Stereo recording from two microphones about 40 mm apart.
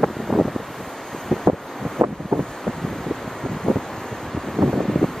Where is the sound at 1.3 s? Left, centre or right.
Centre.